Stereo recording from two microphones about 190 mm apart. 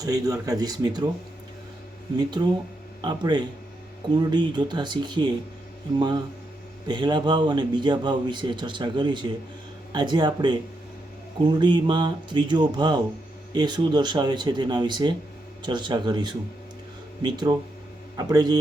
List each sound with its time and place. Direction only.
0.0 s a man's voice: 20° right (ahead or behind)
2.1 s a man's voice: 20° right (ahead or behind)